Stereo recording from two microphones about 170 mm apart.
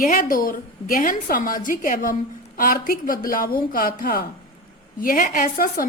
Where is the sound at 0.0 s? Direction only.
55° left (ahead or behind).